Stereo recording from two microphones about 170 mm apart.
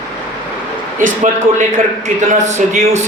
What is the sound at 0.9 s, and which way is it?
Speech, 50° right (ahead or behind).